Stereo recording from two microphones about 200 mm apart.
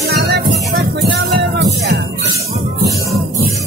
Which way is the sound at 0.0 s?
50° right (ahead or behind).